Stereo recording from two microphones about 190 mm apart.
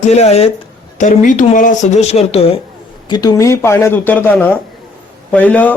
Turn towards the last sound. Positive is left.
turn(degrees=10)  # may be behind; listen again after turning